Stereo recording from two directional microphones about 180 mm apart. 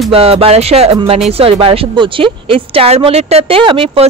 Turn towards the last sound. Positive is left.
turn(degrees=-30)  # may be behind; listen again after turning